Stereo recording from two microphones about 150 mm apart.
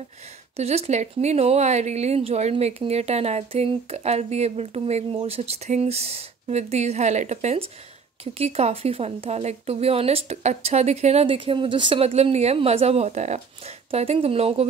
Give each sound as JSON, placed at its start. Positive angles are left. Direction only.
{"t": 0.6, "sound": "speech", "side_deg": -45}